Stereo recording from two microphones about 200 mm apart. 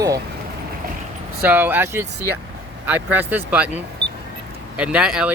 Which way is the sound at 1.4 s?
10° right (ahead or behind).